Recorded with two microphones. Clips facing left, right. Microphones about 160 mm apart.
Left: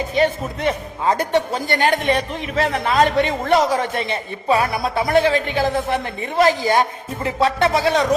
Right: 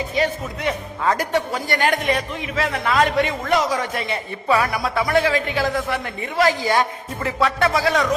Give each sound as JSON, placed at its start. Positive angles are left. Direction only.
{"t": 0.2, "sound": "speech", "side_deg": 25}